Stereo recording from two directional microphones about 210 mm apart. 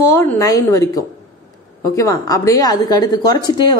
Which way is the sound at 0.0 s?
15° left (ahead or behind).